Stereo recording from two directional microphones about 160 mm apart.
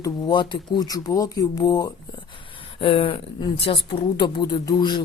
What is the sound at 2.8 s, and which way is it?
Speech, 35° left (ahead or behind).